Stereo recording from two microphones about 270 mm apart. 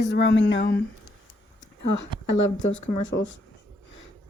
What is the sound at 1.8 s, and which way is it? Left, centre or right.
Speech, left.